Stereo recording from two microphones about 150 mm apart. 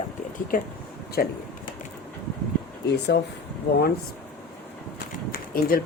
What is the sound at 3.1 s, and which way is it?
Speech, 90° left.